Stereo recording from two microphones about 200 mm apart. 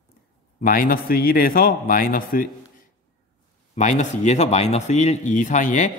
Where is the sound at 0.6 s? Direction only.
45° left (ahead or behind).